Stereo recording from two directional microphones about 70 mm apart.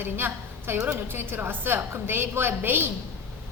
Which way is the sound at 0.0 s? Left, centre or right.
Right.